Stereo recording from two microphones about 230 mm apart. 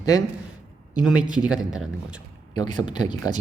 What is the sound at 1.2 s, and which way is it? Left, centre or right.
Speech, centre.